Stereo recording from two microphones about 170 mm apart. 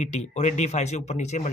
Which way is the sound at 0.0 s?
40° left (ahead or behind).